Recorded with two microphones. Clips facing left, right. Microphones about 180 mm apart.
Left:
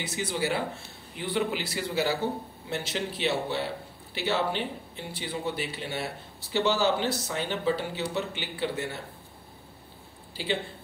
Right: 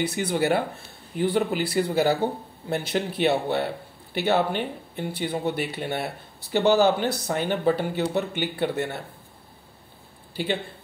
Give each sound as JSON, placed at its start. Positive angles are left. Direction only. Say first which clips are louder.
{"t": 0.0, "sound": "a man's voice", "louder": "right 6 dB", "side_deg": -60}
{"t": 1.1, "sound": "a man's voice", "louder": "right 6 dB", "side_deg": -45}
{"t": 10.3, "sound": "speech", "louder": "right 3 dB", "side_deg": -55}